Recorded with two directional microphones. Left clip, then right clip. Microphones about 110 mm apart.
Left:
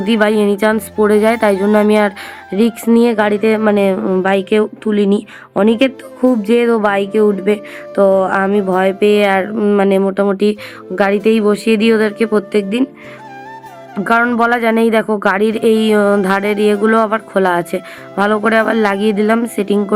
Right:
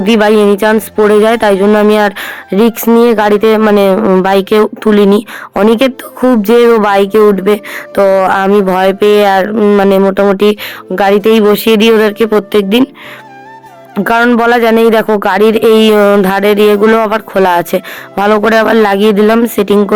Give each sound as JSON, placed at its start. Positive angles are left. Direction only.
{"t": 0.0, "sound": "speech", "side_deg": -25}
{"t": 4.2, "sound": "speech", "side_deg": -50}
{"t": 13.9, "sound": "speech", "side_deg": -20}